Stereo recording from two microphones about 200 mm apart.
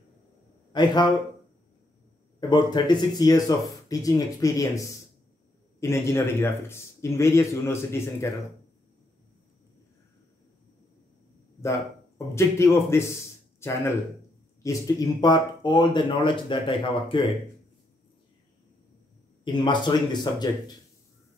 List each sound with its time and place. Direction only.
0.7 s speech: 20° left (ahead or behind)
2.5 s speech: 20° left (ahead or behind)
12.4 s speech: 15° left (ahead or behind)
19.4 s speech: 20° left (ahead or behind)